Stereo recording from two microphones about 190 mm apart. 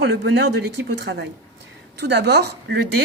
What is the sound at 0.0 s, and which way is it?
Speech, 65° right (ahead or behind).